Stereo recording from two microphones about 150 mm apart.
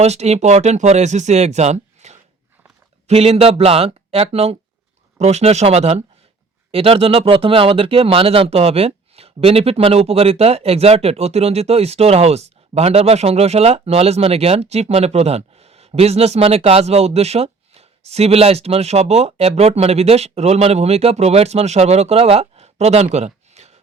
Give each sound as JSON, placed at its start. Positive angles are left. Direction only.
{"t": 0.0, "sound": "speech", "side_deg": -45}